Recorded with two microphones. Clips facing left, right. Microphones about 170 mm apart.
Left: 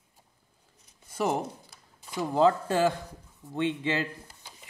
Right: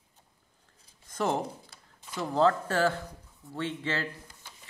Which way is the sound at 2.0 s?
15° left (ahead or behind).